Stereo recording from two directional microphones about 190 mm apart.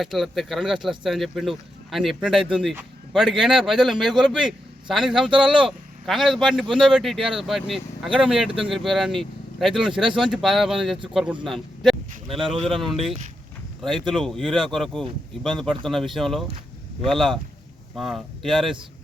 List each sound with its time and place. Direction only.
0.0 s a man's voice: centre (ahead or behind)
12.3 s speech: 30° right (ahead or behind)
12.7 s speech: centre (ahead or behind)